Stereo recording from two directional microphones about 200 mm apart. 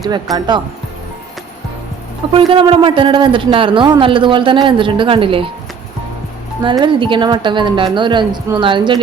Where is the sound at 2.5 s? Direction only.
25° right (ahead or behind).